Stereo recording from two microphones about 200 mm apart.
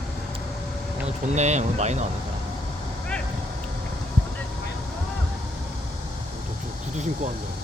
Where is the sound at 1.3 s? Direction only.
35° right (ahead or behind).